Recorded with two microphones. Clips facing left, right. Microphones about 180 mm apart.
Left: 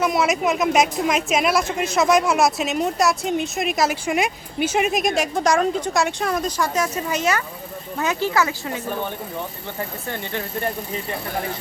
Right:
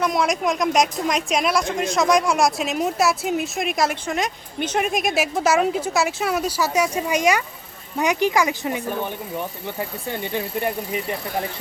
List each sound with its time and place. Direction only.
0.0 s a woman's voice: 5° left (ahead or behind); by 8.8 s 15° right (ahead or behind)
10.1 s speech: 15° right (ahead or behind)